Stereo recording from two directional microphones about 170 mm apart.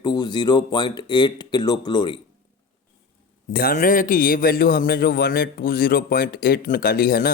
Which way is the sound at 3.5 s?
60° left (ahead or behind).